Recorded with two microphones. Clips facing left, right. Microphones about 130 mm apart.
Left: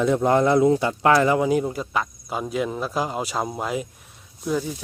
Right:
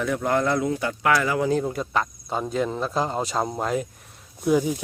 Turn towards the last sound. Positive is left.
turn(degrees=-10)  # may be behind; listen again after turning